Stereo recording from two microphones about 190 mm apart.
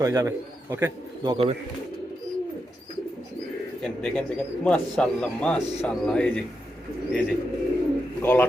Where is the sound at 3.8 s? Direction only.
5° left (ahead or behind).